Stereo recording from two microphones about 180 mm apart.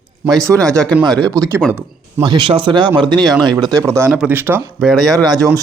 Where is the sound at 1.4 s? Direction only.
15° right (ahead or behind).